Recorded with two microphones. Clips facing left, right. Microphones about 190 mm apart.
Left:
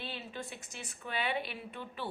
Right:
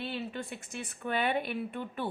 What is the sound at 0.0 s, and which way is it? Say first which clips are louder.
A woman's voice: right 6 dB; 60° right (ahead or behind).